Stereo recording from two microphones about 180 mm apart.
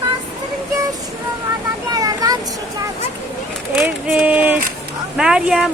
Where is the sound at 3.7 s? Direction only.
5° right (ahead or behind).